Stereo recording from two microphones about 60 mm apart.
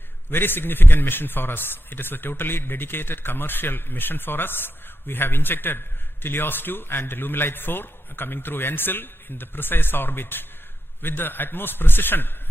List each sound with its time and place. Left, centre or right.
0.3 s a man's voice: left